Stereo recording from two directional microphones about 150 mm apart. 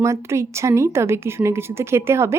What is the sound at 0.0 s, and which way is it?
Speech, 20° right (ahead or behind).